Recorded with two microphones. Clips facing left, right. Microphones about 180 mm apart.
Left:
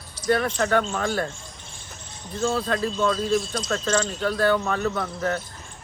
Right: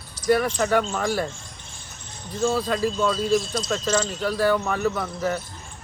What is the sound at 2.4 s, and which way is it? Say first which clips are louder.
A man's voice: right 2 dB; 10° right (ahead or behind).